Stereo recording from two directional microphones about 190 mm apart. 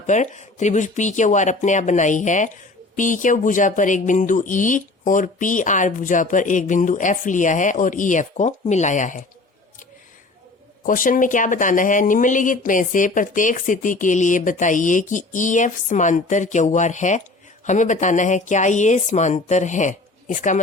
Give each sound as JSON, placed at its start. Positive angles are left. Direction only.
{"t": 0.1, "sound": "speech", "side_deg": 40}
{"t": 10.8, "sound": "speech", "side_deg": 45}